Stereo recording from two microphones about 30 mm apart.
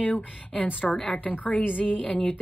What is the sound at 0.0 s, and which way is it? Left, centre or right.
A woman's voice, left.